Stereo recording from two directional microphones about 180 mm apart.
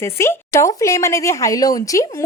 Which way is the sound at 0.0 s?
15° left (ahead or behind).